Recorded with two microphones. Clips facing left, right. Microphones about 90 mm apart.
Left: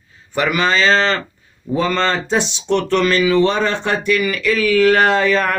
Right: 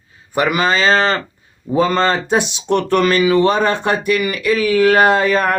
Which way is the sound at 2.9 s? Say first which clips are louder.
Right 2 dB; 50° right (ahead or behind).